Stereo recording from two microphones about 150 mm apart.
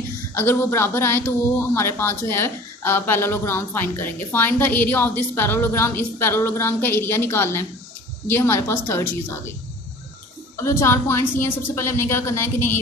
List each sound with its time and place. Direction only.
0.4 s speech: 15° left (ahead or behind)
10.6 s speech: 20° left (ahead or behind)